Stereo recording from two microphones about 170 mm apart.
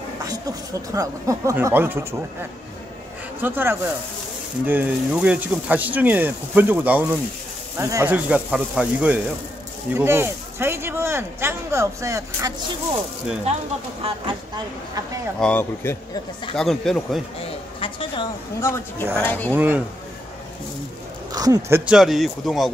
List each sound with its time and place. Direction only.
0.2 s speech: 20° right (ahead or behind)
3.3 s speech: 15° right (ahead or behind)
14.0 s speech: 30° right (ahead or behind)
15.4 s speech: 10° left (ahead or behind)
16.5 s speech: 5° left (ahead or behind)
17.4 s a sound: 30° left (ahead or behind)
18.6 s speech: 15° left (ahead or behind)
19.5 s speech: 10° right (ahead or behind)
21.3 s speech: 20° right (ahead or behind)
21.9 s speech: centre (ahead or behind)